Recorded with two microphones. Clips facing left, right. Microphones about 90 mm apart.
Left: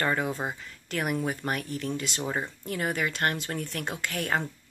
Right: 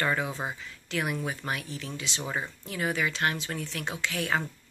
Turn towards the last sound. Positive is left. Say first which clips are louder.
# even
turn(degrees=45)  # may be behind; listen again after turning